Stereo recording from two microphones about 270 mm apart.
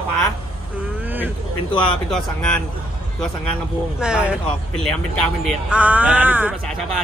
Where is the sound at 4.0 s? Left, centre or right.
Centre.